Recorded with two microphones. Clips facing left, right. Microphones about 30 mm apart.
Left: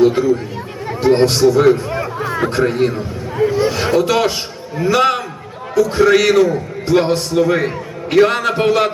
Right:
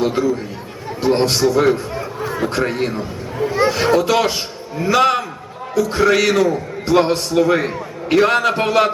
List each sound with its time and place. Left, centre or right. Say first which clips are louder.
0.0 s a man's voice: left 5 dB; centre
2.0 s a sound: left 3 dB; left
2.5 s a man's voice: left 4 dB; centre